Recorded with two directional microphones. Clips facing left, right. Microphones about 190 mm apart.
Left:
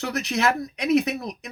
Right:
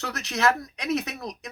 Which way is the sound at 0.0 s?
10° left (ahead or behind).